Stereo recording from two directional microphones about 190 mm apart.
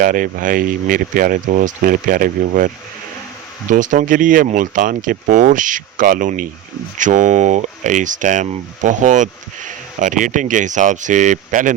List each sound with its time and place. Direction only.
0.0 s speech: 45° right (ahead or behind)